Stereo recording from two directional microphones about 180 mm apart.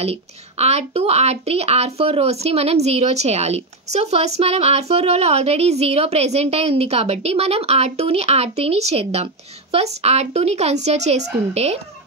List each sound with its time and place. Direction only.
0.0 s speech: 35° right (ahead or behind)